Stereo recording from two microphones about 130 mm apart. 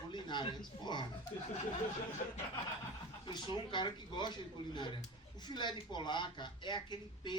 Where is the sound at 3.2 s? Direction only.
35° left (ahead or behind).